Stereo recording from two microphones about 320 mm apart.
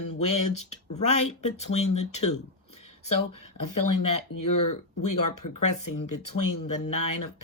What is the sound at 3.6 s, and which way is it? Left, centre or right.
Speech, left.